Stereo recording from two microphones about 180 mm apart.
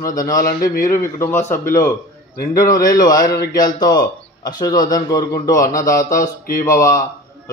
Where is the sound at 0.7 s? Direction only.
50° left (ahead or behind).